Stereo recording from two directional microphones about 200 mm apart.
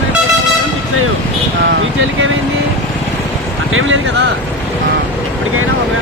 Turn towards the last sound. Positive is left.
turn(degrees=-75)  # may be behind; listen again after turning